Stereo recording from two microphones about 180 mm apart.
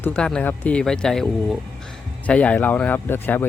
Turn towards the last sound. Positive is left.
turn(degrees=10)  # may be behind; listen again after turning